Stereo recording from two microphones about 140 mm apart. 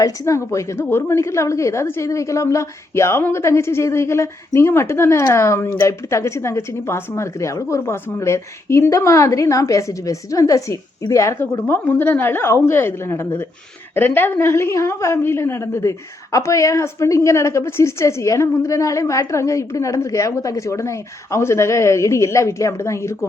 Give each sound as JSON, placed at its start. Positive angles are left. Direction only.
{"t": 0.0, "sound": "a woman's voice", "side_deg": 20}